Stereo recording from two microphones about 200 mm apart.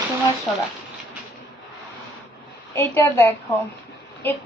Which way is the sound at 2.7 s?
10° left (ahead or behind).